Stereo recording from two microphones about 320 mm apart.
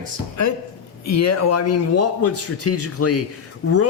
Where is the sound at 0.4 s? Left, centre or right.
Left.